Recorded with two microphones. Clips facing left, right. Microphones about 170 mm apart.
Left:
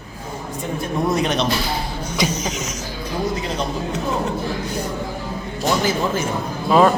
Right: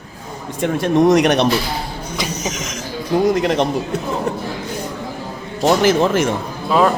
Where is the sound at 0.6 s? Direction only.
90° right; by 1.5 s 70° right (ahead or behind).